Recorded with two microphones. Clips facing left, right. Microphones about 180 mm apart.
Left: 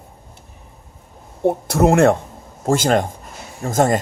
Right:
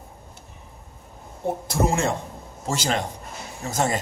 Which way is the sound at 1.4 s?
65° left (ahead or behind).